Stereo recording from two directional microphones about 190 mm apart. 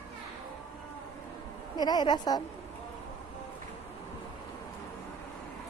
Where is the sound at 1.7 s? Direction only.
20° left (ahead or behind).